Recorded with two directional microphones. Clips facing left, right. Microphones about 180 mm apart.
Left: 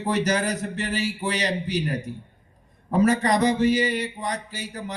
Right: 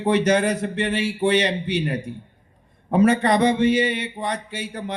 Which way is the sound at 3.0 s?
25° right (ahead or behind).